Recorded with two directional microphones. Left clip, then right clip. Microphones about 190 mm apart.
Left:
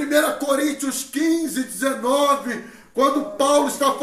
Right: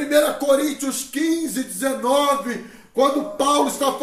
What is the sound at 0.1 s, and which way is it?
Speech, 15° right (ahead or behind).